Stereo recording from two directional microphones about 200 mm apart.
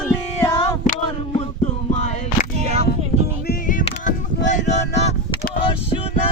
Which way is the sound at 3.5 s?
40° left (ahead or behind).